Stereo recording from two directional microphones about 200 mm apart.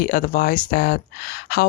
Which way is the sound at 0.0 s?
45° left (ahead or behind).